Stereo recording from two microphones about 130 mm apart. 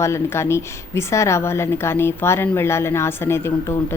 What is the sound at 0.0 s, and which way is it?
Speech, 20° left (ahead or behind).